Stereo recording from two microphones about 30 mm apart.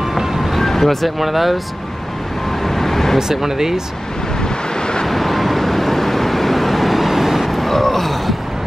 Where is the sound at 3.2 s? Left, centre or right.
Centre.